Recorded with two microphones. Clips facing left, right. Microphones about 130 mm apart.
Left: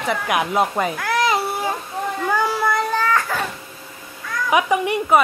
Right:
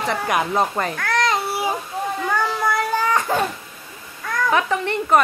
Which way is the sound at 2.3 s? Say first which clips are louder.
Left 2 dB; centre (ahead or behind).